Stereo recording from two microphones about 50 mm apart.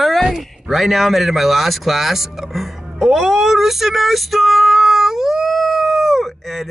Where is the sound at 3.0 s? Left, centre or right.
Centre.